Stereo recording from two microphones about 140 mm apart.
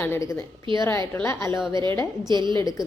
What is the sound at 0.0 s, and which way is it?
A woman's voice, 15° left (ahead or behind).